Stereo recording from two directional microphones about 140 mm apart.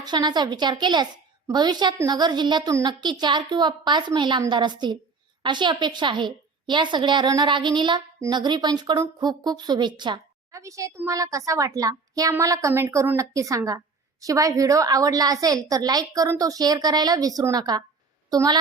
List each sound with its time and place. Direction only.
0.0 s a woman's voice: 30° right (ahead or behind)